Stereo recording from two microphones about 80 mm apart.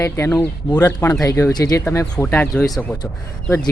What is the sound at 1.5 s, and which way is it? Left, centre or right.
Speech, left.